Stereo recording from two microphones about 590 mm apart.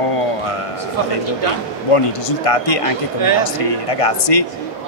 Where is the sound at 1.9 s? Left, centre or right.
Left.